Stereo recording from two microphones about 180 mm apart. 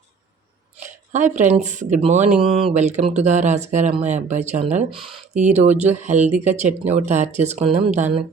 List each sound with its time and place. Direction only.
0.8 s speech: 40° right (ahead or behind)